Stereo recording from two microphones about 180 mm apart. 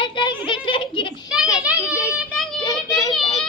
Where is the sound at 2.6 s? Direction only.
20° left (ahead or behind).